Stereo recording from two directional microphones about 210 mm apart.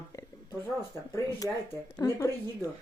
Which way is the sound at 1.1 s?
15° left (ahead or behind).